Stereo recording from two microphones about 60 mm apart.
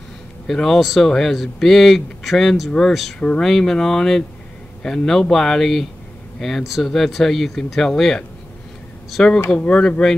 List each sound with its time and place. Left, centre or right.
0.5 s speech: centre
3.2 s speech: centre
3.4 s speech: centre